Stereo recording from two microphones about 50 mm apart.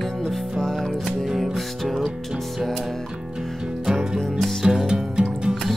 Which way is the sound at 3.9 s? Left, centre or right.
Centre.